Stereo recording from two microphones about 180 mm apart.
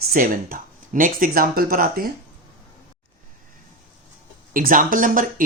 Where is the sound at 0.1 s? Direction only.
50° right (ahead or behind).